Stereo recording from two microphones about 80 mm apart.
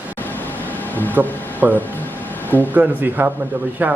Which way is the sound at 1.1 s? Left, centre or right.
Right.